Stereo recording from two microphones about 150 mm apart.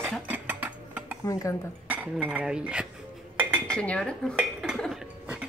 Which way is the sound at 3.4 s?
10° right (ahead or behind).